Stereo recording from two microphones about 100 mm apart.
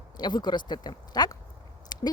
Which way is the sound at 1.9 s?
45° left (ahead or behind).